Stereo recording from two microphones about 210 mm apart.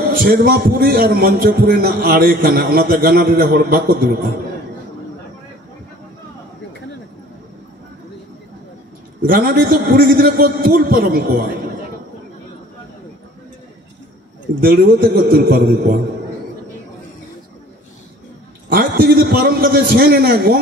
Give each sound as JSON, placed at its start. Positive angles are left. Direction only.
{"t": 0.1, "sound": "a man's voice", "side_deg": -40}
{"t": 9.2, "sound": "a man's voice", "side_deg": -45}
{"t": 14.6, "sound": "a man's voice", "side_deg": -45}
{"t": 18.7, "sound": "a man's voice", "side_deg": -45}